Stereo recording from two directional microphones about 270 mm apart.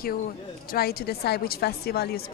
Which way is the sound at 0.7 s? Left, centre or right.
Left.